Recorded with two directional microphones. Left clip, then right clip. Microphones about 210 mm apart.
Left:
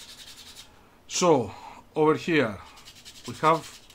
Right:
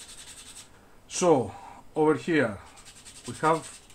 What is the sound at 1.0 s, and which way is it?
Speech, 15° left (ahead or behind).